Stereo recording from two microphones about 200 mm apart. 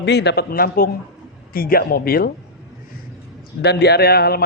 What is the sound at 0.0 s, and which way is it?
Speech, 60° left (ahead or behind).